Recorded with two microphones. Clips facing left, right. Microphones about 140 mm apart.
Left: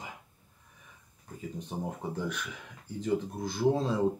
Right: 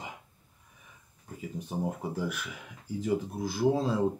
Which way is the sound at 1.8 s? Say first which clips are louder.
Right 2 dB; 5° right (ahead or behind).